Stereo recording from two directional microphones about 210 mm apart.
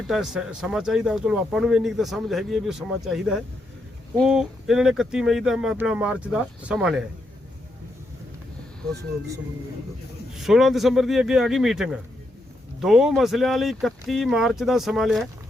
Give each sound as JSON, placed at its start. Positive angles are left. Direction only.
{"t": 0.1, "sound": "speech", "side_deg": 0}
{"t": 10.3, "sound": "speech", "side_deg": 0}